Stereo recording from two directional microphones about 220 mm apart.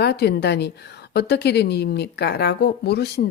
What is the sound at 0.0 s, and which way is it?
Speech, 50° left (ahead or behind).